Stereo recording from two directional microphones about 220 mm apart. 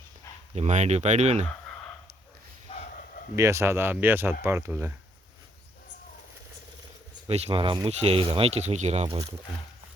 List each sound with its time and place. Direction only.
0.5 s speech: 30° right (ahead or behind)
2.6 s bow-wow: 30° left (ahead or behind)
3.3 s speech: 15° right (ahead or behind)
7.3 s speech: 30° right (ahead or behind)